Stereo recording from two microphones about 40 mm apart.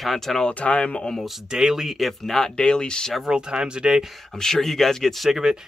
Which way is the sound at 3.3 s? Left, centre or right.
Right.